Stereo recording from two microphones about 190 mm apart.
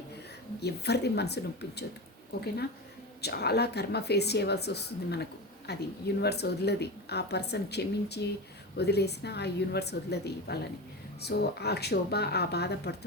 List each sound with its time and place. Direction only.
0.6 s speech: 60° left (ahead or behind)